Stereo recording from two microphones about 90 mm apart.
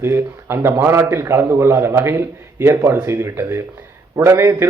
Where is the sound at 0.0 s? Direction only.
25° right (ahead or behind).